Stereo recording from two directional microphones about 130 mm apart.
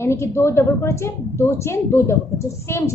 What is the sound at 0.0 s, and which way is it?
A woman's voice, 20° left (ahead or behind).